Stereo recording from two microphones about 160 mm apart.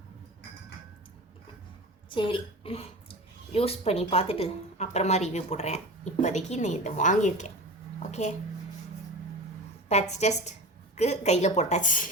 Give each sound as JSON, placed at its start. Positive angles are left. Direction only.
{"t": 2.0, "sound": "a woman's voice", "side_deg": 30}
{"t": 7.9, "sound": "a sound", "side_deg": 45}
{"t": 9.9, "sound": "a woman's voice", "side_deg": 45}